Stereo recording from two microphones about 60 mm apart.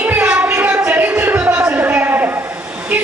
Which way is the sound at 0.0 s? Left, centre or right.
Right.